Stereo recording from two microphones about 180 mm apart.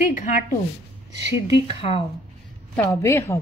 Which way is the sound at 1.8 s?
30° left (ahead or behind).